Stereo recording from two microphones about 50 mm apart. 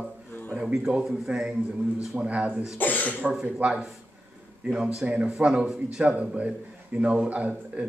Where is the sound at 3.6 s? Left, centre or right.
Right.